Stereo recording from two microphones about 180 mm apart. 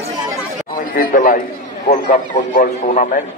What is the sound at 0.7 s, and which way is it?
A man's voice, 50° left (ahead or behind).